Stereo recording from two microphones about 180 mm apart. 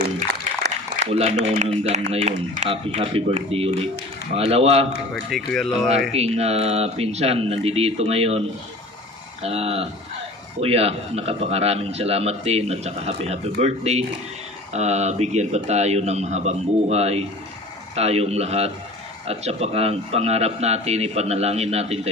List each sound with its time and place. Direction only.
1.0 s a man's voice: 35° right (ahead or behind)
5.1 s speech: centre (ahead or behind)
6.1 s a man's voice: 35° right (ahead or behind)